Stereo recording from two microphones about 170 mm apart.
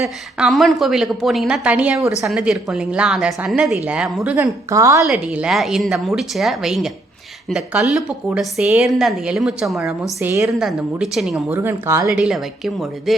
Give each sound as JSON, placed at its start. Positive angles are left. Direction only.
{"t": 0.0, "sound": "a woman's voice", "side_deg": -5}
{"t": 4.7, "sound": "a woman's voice", "side_deg": -20}
{"t": 5.0, "sound": "a woman's voice", "side_deg": -5}
{"t": 10.2, "sound": "speech", "side_deg": -15}
{"t": 10.6, "sound": "a woman's voice", "side_deg": -5}
{"t": 11.4, "sound": "speech", "side_deg": -15}
{"t": 12.2, "sound": "a woman's voice", "side_deg": 0}